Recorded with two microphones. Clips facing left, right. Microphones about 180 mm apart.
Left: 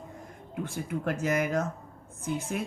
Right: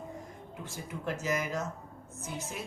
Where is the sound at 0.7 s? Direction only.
55° left (ahead or behind).